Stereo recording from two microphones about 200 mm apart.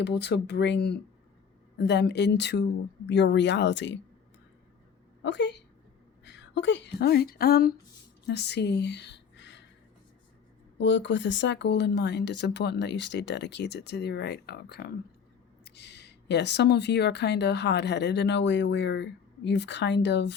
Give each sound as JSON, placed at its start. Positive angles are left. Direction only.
{"t": 0.0, "sound": "speech", "side_deg": 60}
{"t": 5.2, "sound": "a woman's voice", "side_deg": 60}
{"t": 10.8, "sound": "speech", "side_deg": 65}